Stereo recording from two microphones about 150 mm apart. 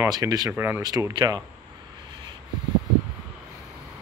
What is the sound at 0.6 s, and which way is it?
Speech, 15° right (ahead or behind).